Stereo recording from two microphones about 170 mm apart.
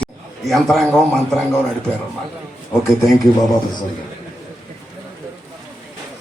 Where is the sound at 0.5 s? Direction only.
5° left (ahead or behind).